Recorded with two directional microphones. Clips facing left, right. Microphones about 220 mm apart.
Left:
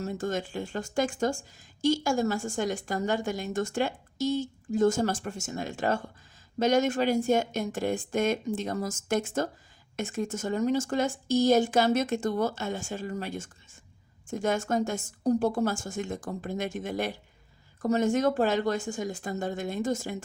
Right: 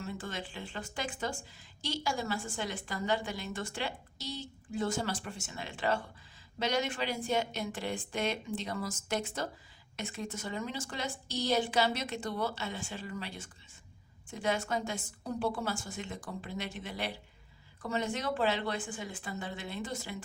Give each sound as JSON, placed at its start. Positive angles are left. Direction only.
{"t": 0.0, "sound": "a woman's voice", "side_deg": 45}